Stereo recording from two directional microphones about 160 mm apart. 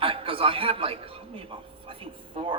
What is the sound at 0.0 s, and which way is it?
A man's voice, 35° right (ahead or behind).